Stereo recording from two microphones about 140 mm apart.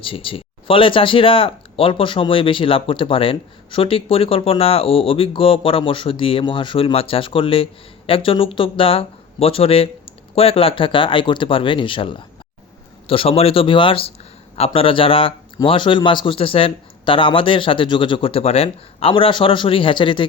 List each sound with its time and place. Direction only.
0.0 s speech: 40° left (ahead or behind)